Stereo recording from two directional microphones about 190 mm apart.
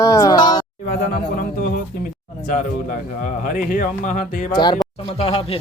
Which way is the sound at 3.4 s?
45° left (ahead or behind).